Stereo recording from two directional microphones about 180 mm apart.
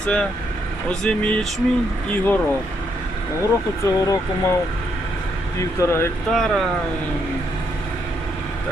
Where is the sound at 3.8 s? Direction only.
15° left (ahead or behind).